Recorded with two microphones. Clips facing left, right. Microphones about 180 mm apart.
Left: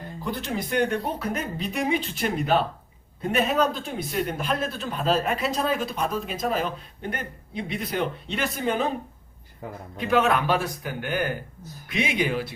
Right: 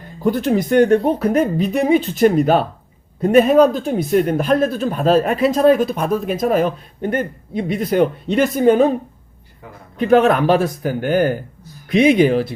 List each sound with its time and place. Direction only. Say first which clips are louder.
0.3 s speech: right 13 dB; 45° right (ahead or behind)
10.0 s speech: right 9 dB; 45° right (ahead or behind)